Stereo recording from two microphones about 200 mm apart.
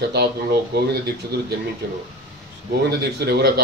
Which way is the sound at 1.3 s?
55° right (ahead or behind).